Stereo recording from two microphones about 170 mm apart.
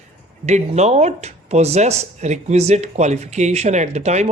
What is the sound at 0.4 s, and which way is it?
Speech, 40° right (ahead or behind).